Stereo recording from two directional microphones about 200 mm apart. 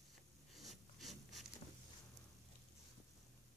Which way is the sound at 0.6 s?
Centre (ahead or behind).